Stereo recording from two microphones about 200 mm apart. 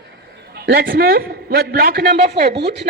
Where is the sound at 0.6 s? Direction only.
50° right (ahead or behind).